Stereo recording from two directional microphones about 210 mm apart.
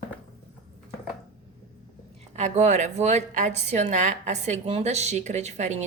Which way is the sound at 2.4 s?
35° right (ahead or behind).